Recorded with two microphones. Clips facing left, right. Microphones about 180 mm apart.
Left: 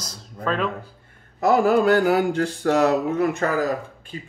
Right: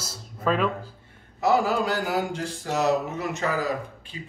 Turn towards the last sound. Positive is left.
turn(degrees=50)  # may be behind; listen again after turning